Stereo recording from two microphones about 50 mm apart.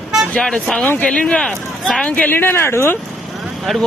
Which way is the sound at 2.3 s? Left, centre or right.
Left.